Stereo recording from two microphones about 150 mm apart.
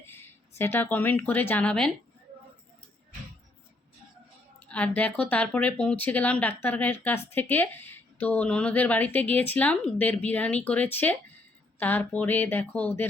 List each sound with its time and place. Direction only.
0.0 s a sound: 15° left (ahead or behind)
0.6 s speech: 15° left (ahead or behind)
4.7 s speech: 10° left (ahead or behind)